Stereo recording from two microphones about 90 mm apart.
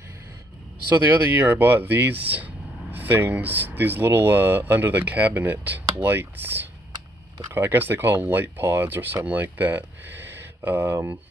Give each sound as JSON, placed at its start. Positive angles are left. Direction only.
{"t": 0.9, "sound": "speech", "side_deg": -25}